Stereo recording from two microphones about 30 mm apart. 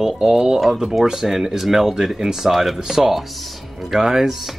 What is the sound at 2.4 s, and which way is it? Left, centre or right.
Speech, centre.